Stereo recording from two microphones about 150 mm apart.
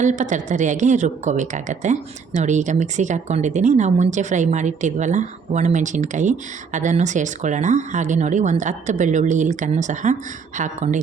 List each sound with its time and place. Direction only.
0.0 s speech: 55° right (ahead or behind)